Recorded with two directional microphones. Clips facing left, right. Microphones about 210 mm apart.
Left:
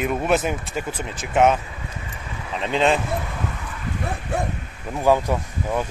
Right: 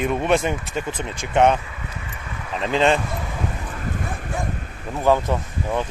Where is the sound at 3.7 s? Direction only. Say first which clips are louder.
Even; 45° right (ahead or behind).